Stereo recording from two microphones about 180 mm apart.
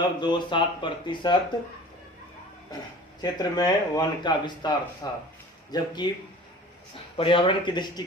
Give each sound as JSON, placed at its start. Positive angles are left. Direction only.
{"t": 0.0, "sound": "speech", "side_deg": 25}
{"t": 3.2, "sound": "speech", "side_deg": 20}
{"t": 7.2, "sound": "speech", "side_deg": 30}